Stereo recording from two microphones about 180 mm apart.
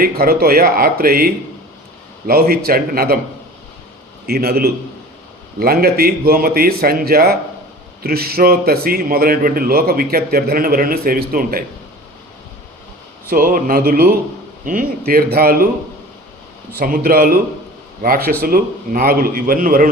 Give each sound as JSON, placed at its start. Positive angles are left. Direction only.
{"t": 0.0, "sound": "a man's voice", "side_deg": -55}
{"t": 4.3, "sound": "a man's voice", "side_deg": -60}
{"t": 13.2, "sound": "a man's voice", "side_deg": -50}
{"t": 16.7, "sound": "a man's voice", "side_deg": -55}